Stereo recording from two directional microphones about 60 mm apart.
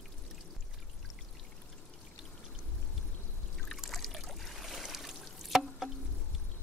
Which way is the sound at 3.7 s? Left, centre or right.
Centre.